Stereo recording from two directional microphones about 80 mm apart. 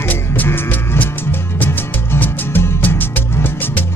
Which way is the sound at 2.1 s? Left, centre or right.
Left.